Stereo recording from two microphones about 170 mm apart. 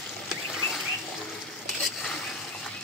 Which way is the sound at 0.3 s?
Centre (ahead or behind).